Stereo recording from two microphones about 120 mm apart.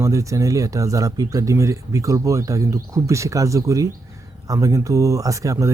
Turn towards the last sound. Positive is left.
turn(degrees=-25)  # may be behind; listen again after turning